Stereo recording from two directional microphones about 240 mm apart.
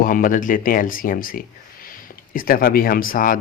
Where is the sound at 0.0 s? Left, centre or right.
Left.